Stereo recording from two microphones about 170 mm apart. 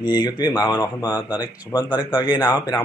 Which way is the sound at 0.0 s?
25° left (ahead or behind).